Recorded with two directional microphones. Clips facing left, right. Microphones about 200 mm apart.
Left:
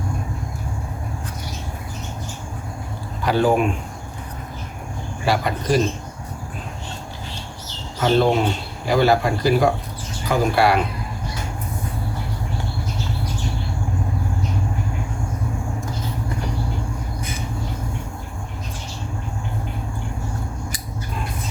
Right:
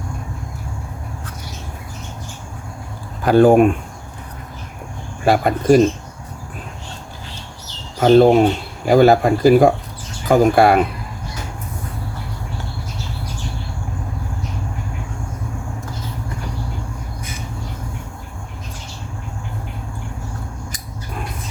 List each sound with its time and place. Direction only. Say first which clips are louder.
3.2 s speech: right 7 dB; 50° right (ahead or behind)
5.2 s speech: right 6 dB; 50° right (ahead or behind)
7.9 s speech: right 7 dB; 50° right (ahead or behind)